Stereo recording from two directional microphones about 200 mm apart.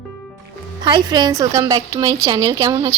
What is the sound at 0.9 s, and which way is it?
A woman's voice, 20° right (ahead or behind).